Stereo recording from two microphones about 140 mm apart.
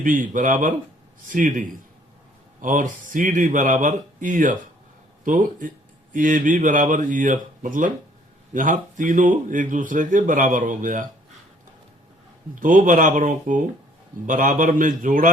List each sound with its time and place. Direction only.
0.0 s speech: 70° right (ahead or behind)
12.5 s speech: 70° right (ahead or behind)